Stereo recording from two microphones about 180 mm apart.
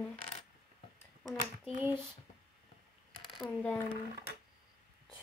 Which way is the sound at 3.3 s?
Centre (ahead or behind).